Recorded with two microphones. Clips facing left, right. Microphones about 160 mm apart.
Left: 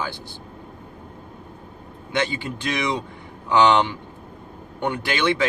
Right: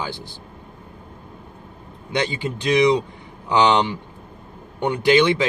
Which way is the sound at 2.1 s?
15° right (ahead or behind).